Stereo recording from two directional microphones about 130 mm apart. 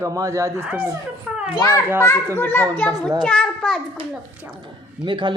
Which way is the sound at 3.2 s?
5° left (ahead or behind).